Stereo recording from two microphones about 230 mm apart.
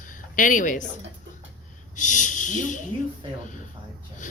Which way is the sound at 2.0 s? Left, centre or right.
Left.